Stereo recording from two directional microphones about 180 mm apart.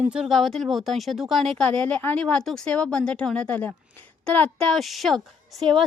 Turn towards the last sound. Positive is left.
turn(degrees=0)  # may be behind; listen again after turning